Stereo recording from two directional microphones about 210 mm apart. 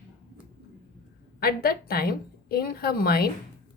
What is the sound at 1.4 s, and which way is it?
A woman's voice, 45° left (ahead or behind).